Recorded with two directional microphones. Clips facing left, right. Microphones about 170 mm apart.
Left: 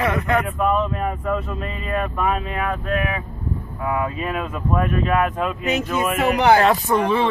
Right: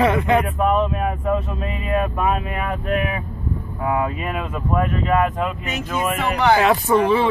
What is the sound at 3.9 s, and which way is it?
Speech, 20° right (ahead or behind).